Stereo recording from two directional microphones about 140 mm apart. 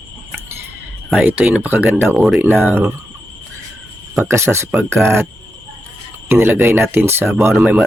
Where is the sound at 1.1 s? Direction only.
10° right (ahead or behind).